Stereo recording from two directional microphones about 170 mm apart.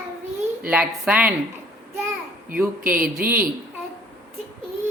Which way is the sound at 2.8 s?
60° right (ahead or behind).